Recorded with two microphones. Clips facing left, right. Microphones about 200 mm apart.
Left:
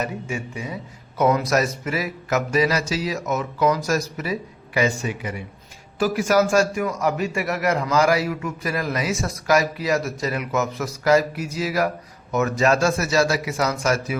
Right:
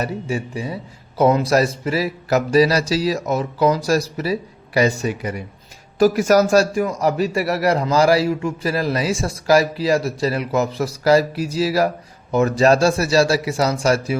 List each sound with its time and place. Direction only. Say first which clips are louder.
0.0 s a man's voice: right 4 dB; 35° right (ahead or behind)